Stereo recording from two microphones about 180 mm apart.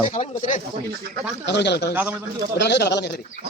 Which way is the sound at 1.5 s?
70° left (ahead or behind).